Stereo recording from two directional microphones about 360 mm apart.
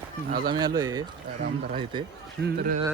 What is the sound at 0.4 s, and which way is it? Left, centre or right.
Speech, centre.